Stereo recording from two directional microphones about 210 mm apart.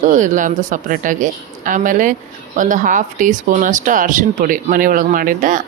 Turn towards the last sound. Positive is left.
turn(degrees=-40)  # may be behind; listen again after turning